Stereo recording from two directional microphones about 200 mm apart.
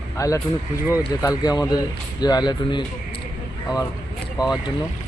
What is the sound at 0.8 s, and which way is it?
Speech, 10° right (ahead or behind).